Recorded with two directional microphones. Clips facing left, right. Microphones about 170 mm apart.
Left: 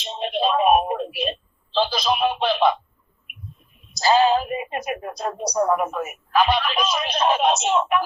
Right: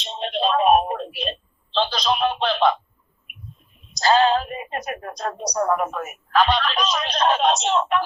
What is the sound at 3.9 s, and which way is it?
Speech, 5° left (ahead or behind).